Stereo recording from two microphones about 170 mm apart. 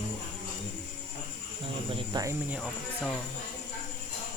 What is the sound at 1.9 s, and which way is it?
Speech, 20° right (ahead or behind).